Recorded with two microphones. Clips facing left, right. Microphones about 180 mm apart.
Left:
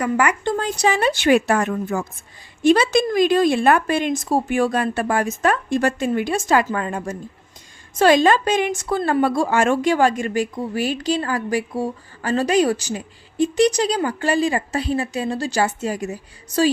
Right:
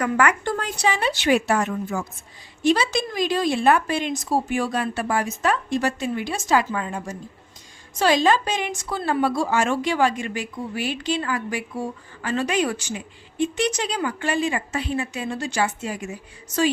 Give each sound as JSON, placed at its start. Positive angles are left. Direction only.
{"t": 0.0, "sound": "a woman's voice", "side_deg": 10}
{"t": 0.4, "sound": "speech", "side_deg": 25}
{"t": 0.8, "sound": "a woman's voice", "side_deg": 45}